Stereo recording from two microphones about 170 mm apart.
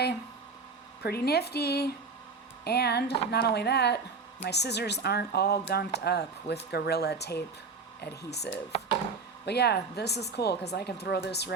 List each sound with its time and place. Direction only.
1.0 s speech: 65° left (ahead or behind)